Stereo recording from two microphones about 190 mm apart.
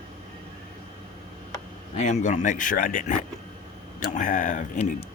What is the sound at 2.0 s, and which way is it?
Speech, 40° left (ahead or behind).